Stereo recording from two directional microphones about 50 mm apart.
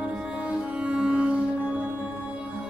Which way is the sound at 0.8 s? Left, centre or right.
Centre.